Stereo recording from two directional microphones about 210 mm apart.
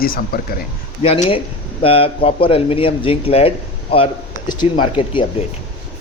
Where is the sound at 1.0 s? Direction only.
25° left (ahead or behind).